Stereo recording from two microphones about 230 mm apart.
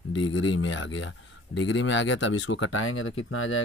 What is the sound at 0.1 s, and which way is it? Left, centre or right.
Speech, left.